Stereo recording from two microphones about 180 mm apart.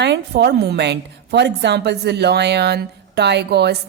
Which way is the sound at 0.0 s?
70° right (ahead or behind).